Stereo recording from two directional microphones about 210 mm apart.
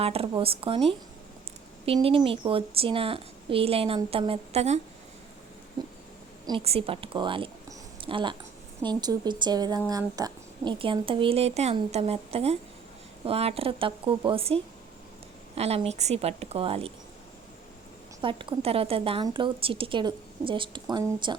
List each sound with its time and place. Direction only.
0.0 s a woman's voice: 25° right (ahead or behind)
6.4 s a woman's voice: 25° right (ahead or behind)
18.2 s a woman's voice: 25° right (ahead or behind)